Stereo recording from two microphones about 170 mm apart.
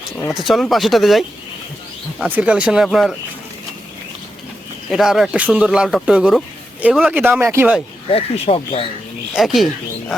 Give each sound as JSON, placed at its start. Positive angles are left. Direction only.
{"t": 0.3, "sound": "speech", "side_deg": 0}
{"t": 4.9, "sound": "speech", "side_deg": 0}
{"t": 8.1, "sound": "speech", "side_deg": 35}
{"t": 9.3, "sound": "speech", "side_deg": 0}